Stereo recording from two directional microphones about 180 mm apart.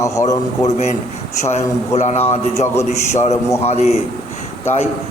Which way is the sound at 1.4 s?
40° left (ahead or behind).